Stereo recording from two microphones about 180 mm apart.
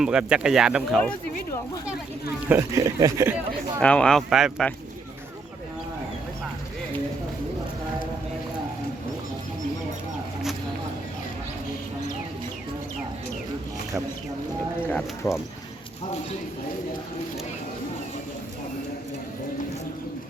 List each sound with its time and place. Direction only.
0.0 s speech: 5° right (ahead or behind)
2.5 s speech: 15° right (ahead or behind)
3.8 s speech: 5° left (ahead or behind)
14.8 s speech: 10° left (ahead or behind)